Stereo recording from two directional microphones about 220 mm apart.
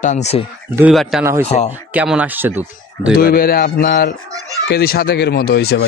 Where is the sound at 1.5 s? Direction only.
35° left (ahead or behind).